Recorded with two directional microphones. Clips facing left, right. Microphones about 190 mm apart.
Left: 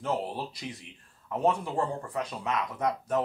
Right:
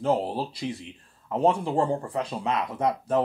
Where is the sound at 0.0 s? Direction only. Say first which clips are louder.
Right 6 dB; 30° right (ahead or behind).